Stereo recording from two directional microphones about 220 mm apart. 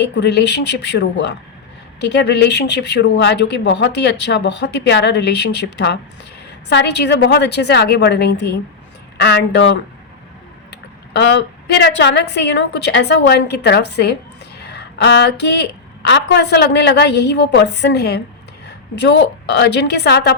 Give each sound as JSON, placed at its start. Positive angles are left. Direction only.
{"t": 0.0, "sound": "speech", "side_deg": 50}